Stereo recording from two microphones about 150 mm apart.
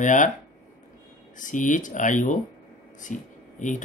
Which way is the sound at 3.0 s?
55° left (ahead or behind).